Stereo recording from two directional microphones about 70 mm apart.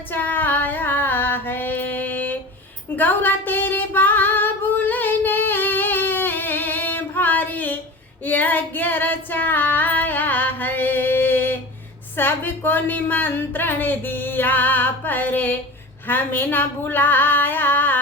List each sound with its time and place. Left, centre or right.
0.1 s female singing: left
12.1 s speech: left